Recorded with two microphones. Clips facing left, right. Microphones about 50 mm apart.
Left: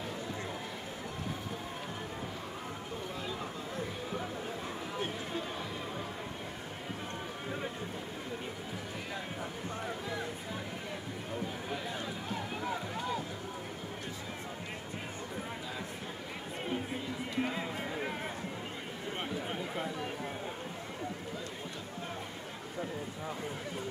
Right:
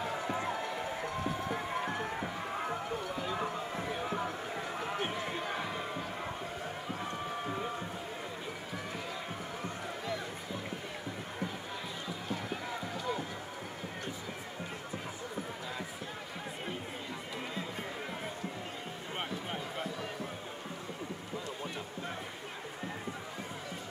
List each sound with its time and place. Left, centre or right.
1.5 s music: right
17.5 s music: left